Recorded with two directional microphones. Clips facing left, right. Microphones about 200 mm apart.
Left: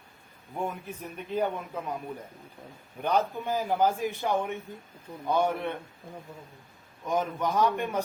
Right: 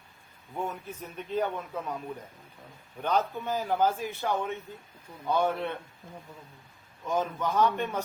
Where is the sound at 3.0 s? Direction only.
10° left (ahead or behind).